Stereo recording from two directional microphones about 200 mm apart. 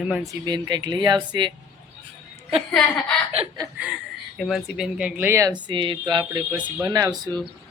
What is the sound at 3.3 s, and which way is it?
Speech, 30° right (ahead or behind).